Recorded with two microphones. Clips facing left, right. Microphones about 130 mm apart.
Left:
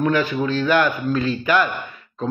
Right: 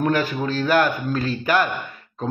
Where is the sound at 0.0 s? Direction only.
45° right (ahead or behind).